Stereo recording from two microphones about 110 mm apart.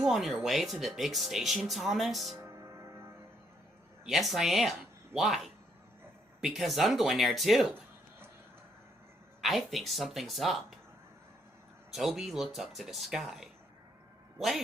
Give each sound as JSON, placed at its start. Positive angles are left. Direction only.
{"t": 0.0, "sound": "speech", "side_deg": -5}
{"t": 2.4, "sound": "music", "side_deg": -25}
{"t": 4.0, "sound": "speech", "side_deg": 0}
{"t": 9.4, "sound": "speech", "side_deg": 0}
{"t": 11.9, "sound": "a man's voice", "side_deg": 0}